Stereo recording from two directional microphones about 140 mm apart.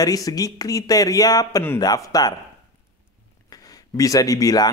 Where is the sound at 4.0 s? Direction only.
25° left (ahead or behind).